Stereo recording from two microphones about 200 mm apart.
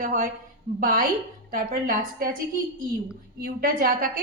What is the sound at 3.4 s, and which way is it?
Speech, 45° right (ahead or behind).